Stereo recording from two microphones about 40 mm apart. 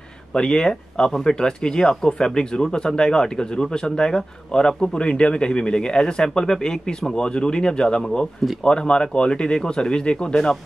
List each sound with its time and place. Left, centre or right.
0.3 s speech: centre